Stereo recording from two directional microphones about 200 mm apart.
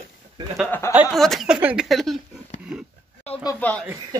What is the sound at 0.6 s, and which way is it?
Speech, 10° left (ahead or behind).